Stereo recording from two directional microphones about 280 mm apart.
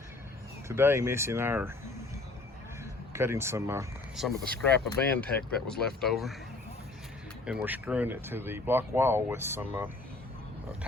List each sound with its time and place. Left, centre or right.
0.7 s speech: centre
3.1 s speech: centre
7.4 s speech: centre